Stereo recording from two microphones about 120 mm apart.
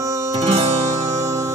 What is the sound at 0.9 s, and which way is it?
Music, 25° right (ahead or behind).